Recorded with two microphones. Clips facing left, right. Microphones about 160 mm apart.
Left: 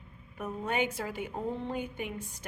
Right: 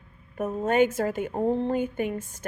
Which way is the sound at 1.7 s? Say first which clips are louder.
Right 9 dB; 45° right (ahead or behind).